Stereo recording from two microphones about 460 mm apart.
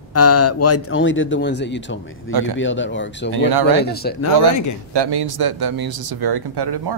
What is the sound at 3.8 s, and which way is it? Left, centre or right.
Speech, centre.